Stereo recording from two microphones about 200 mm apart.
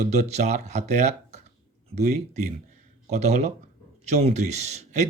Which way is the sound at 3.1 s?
35° right (ahead or behind).